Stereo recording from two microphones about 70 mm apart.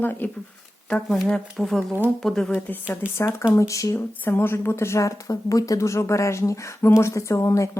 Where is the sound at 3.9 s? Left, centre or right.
Left.